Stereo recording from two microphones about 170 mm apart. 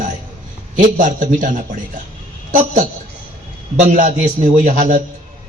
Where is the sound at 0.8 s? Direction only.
50° right (ahead or behind).